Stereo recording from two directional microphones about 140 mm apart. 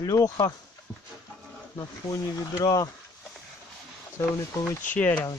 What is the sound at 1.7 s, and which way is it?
Speech, 25° left (ahead or behind).